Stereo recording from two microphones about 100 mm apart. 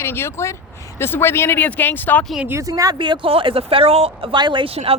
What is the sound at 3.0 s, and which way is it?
Speech, 60° right (ahead or behind).